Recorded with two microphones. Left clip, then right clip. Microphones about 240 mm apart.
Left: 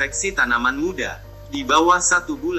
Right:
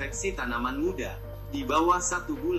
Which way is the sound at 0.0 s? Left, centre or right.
Left.